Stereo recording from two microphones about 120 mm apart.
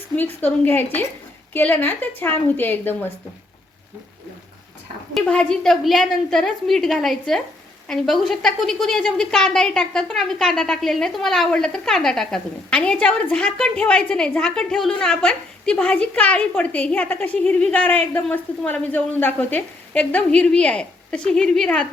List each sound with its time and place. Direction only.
0.2 s a man's voice: 15° left (ahead or behind)
5.1 s a woman's voice: 10° left (ahead or behind)